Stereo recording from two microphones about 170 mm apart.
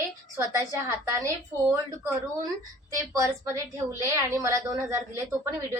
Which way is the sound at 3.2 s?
20° right (ahead or behind).